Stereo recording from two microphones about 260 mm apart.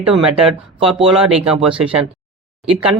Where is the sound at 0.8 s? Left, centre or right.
Centre.